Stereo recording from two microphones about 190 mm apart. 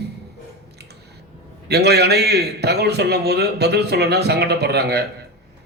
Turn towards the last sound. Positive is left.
turn(degrees=-60)  # may be behind; listen again after turning